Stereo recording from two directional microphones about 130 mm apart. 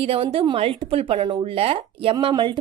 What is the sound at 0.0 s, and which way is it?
A woman's voice, 50° right (ahead or behind).